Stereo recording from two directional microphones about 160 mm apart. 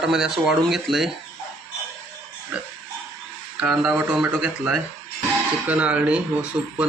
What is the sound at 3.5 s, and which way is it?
Speech, 5° right (ahead or behind).